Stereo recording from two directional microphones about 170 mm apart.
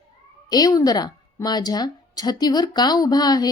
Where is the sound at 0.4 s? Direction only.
25° left (ahead or behind).